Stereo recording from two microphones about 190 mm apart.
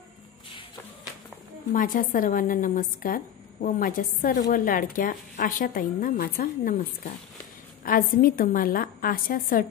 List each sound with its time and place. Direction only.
1.7 s a woman's voice: 45° left (ahead or behind)
7.8 s a woman's voice: 45° left (ahead or behind)